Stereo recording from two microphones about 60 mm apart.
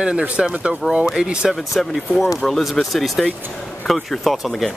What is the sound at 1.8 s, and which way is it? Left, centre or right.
Speech, centre.